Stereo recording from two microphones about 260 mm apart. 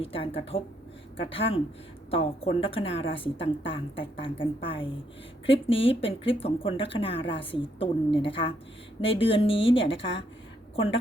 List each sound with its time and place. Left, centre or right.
0.0 s speech: left